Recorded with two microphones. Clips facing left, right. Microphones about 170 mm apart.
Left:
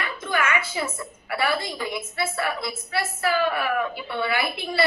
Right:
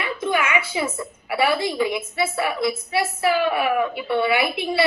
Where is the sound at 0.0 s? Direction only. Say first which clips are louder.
Right 3 dB; 15° right (ahead or behind).